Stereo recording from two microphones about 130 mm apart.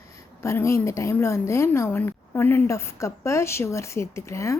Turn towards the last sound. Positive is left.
turn(degrees=20)  # may be behind; listen again after turning